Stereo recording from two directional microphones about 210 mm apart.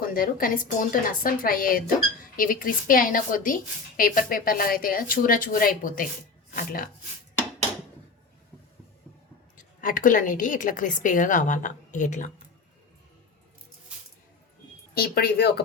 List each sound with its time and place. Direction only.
0.0 s a woman's voice: 45° left (ahead or behind)
9.6 s a woman's voice: 40° left (ahead or behind)
14.9 s a woman's voice: 50° left (ahead or behind)